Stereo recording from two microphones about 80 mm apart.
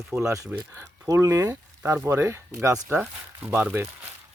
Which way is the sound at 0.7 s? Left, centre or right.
Right.